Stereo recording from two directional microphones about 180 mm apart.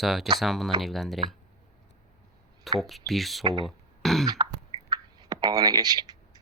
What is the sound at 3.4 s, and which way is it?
Speech, 25° right (ahead or behind).